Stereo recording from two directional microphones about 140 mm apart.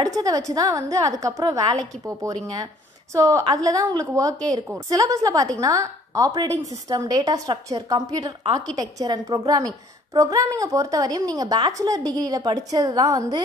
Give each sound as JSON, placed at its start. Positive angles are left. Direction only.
{"t": 0.0, "sound": "a woman's voice", "side_deg": -25}